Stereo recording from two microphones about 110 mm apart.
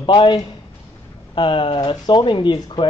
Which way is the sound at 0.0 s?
45° left (ahead or behind).